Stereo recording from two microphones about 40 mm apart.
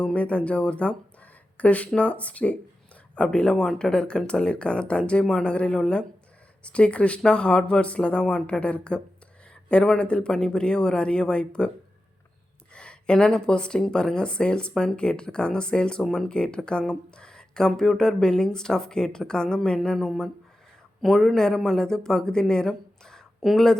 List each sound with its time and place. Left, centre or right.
0.0 s speech: left
3.2 s speech: left
10.0 s speech: left
12.7 s speech: left; by 23.6 s centre